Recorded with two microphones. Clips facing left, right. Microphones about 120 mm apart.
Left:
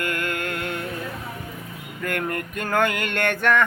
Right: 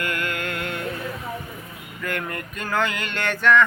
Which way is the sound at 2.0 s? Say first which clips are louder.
Left 3 dB; 50° left (ahead or behind).